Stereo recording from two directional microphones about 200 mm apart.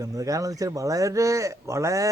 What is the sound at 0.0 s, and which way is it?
Speech, 15° right (ahead or behind).